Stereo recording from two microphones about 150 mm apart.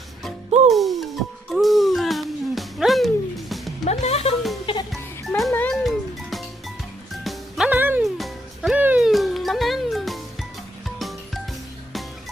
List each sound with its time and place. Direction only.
0.7 s music: centre (ahead or behind)
3.8 s music: 45° left (ahead or behind)
5.5 s music: 10° left (ahead or behind)
5.8 s music: centre (ahead or behind)
8.0 s music: centre (ahead or behind)